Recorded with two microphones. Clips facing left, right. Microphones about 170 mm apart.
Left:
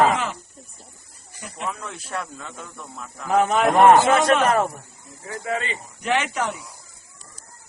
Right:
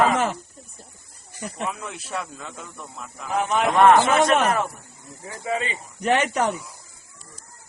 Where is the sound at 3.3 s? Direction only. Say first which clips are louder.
Left 5 dB; 45° left (ahead or behind).